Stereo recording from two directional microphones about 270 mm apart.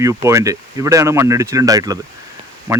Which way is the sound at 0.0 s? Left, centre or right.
Centre.